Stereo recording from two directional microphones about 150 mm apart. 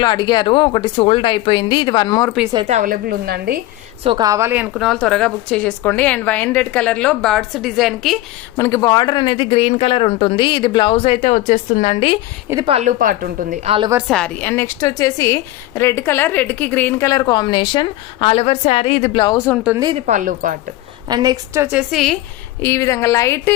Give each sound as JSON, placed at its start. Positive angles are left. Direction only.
{"t": 0.0, "sound": "speech", "side_deg": 30}
{"t": 2.6, "sound": "a woman's voice", "side_deg": -50}
{"t": 2.9, "sound": "a woman's voice", "side_deg": -90}
{"t": 4.2, "sound": "a woman's voice", "side_deg": -20}
{"t": 8.5, "sound": "speech", "side_deg": 20}
{"t": 12.6, "sound": "speech", "side_deg": -40}
{"t": 12.9, "sound": "a woman's voice", "side_deg": -65}
{"t": 13.7, "sound": "speech", "side_deg": -35}
{"t": 14.1, "sound": "a woman's voice", "side_deg": 5}
{"t": 19.7, "sound": "a woman's voice", "side_deg": -25}
{"t": 20.0, "sound": "a woman's voice", "side_deg": -55}
{"t": 21.1, "sound": "a woman's voice", "side_deg": -25}
{"t": 22.6, "sound": "a woman's voice", "side_deg": 20}